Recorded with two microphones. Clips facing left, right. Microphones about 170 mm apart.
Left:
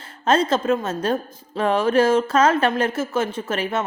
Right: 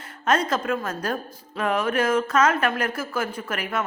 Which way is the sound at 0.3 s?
25° left (ahead or behind).